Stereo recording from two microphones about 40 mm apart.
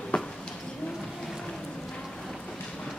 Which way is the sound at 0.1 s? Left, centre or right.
Left.